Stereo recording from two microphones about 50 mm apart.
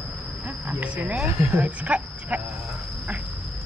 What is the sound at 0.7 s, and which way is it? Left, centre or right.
Speech, right.